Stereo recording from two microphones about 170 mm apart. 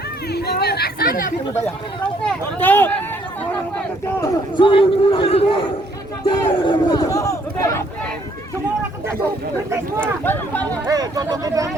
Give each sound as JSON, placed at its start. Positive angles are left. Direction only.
{"t": 0.3, "sound": "speech", "side_deg": 70}
{"t": 1.6, "sound": "speech", "side_deg": 10}
{"t": 4.2, "sound": "speech", "side_deg": 30}
{"t": 10.0, "sound": "speech", "side_deg": 10}
{"t": 10.8, "sound": "speech", "side_deg": -20}